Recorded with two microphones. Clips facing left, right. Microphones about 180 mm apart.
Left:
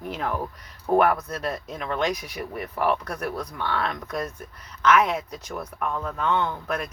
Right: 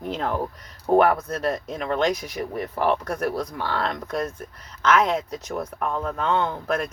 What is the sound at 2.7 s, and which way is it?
Speech, 30° right (ahead or behind).